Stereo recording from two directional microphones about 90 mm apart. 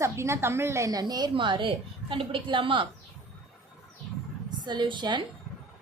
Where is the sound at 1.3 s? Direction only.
65° right (ahead or behind).